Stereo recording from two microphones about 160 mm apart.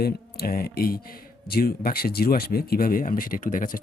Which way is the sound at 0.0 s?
70° left (ahead or behind).